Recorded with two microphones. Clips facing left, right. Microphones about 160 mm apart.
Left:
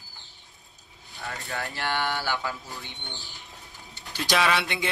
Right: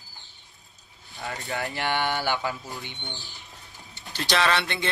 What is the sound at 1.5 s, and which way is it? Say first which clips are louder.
Speech: right 3 dB; 20° right (ahead or behind).